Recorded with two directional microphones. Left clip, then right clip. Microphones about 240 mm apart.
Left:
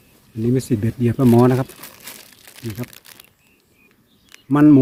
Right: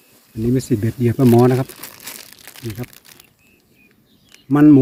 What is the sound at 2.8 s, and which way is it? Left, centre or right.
Crumpling, centre.